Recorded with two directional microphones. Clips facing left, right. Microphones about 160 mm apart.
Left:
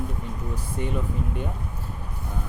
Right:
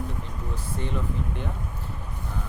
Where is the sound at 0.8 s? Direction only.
15° left (ahead or behind).